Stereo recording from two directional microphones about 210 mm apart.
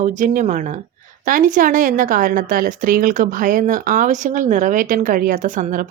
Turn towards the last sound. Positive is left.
turn(degrees=-35)  # may be behind; listen again after turning